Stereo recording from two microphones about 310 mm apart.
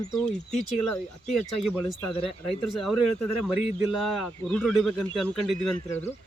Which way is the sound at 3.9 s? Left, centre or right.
Centre.